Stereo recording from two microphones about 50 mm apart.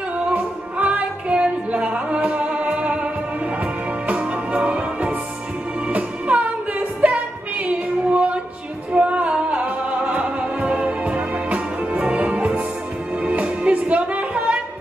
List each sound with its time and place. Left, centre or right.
0.3 s music: right
4.1 s music: right